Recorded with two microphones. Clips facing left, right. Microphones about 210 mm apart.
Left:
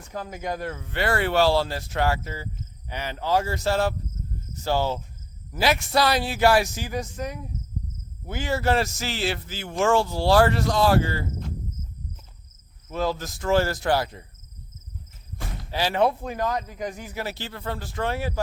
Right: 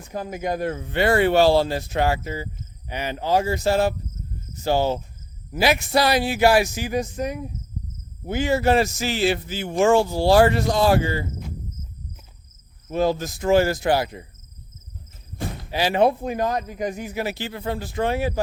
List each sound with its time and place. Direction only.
0.1 s a man's voice: 15° right (ahead or behind)
12.9 s a man's voice: 20° right (ahead or behind)
15.4 s a man's voice: 15° right (ahead or behind)